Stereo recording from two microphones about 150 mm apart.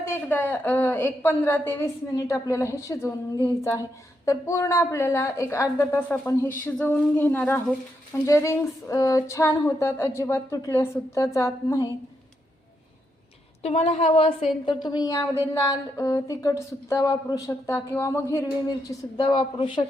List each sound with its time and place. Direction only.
0.0 s a woman's voice: 15° left (ahead or behind)
13.6 s a woman's voice: 45° left (ahead or behind)